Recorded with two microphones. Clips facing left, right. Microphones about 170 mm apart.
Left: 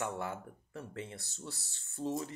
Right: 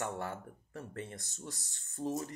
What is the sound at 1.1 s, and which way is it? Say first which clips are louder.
Speech: even; 20° right (ahead or behind).